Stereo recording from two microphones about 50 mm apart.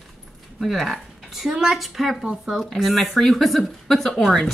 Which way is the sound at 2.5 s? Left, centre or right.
Centre.